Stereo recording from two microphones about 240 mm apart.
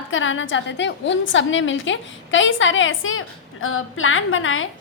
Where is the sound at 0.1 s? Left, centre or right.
Left.